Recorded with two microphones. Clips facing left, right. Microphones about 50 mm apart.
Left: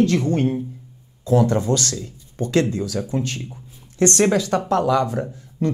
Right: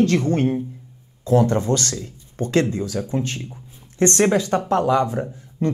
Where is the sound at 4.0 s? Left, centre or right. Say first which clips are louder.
Even; right.